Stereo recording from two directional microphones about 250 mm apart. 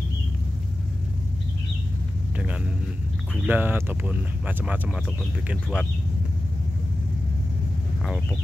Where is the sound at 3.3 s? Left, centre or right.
Centre.